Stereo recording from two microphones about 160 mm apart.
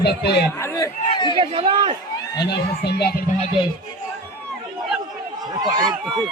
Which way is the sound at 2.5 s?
90° left.